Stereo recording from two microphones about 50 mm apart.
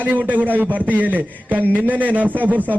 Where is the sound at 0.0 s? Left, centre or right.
Right.